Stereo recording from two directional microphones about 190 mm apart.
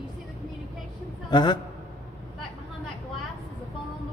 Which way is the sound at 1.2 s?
25° left (ahead or behind).